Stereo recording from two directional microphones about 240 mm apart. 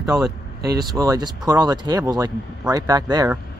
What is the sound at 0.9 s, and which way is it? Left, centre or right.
Speech, centre.